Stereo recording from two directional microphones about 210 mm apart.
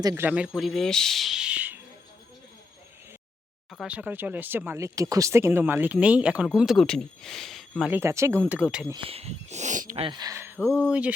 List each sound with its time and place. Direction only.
0.0 s speech: 15° right (ahead or behind)
3.7 s speech: centre (ahead or behind)
8.9 s speech: 25° right (ahead or behind); by 11.1 s 5° right (ahead or behind)